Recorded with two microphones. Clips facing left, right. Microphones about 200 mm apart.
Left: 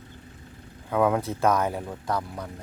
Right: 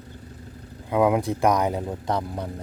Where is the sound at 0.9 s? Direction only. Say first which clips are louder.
Right 3 dB; 15° right (ahead or behind).